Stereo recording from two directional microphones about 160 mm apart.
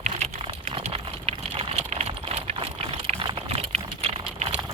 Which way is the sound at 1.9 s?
40° right (ahead or behind).